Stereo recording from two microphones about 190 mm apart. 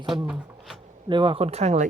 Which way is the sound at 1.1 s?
25° right (ahead or behind).